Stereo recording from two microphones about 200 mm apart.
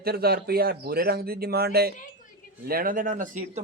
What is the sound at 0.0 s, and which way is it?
A man's voice, 50° right (ahead or behind).